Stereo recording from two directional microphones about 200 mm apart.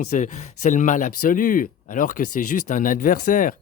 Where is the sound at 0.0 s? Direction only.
40° left (ahead or behind).